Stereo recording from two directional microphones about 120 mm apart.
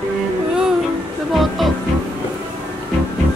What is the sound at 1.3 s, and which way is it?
Music, centre (ahead or behind).